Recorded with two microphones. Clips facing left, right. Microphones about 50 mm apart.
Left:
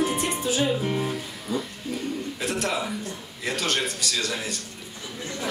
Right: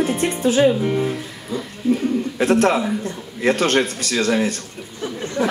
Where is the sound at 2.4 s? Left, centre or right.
Right.